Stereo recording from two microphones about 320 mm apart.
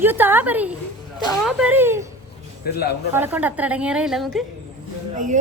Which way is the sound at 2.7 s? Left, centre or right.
Left.